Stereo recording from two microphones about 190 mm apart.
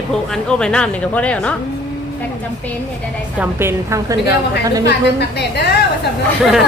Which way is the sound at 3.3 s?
15° right (ahead or behind).